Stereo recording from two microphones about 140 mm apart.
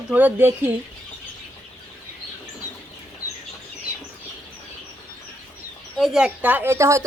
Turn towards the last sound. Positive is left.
turn(degrees=-20)  # may be behind; listen again after turning